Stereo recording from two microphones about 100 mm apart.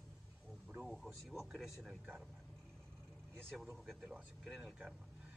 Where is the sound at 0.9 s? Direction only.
Centre (ahead or behind).